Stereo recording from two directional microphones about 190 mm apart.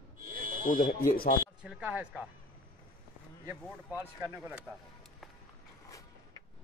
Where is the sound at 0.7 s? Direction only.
45° left (ahead or behind).